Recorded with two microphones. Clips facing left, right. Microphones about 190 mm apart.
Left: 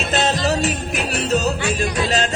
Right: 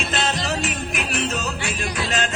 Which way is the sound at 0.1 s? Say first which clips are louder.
Left 8 dB; 40° left (ahead or behind).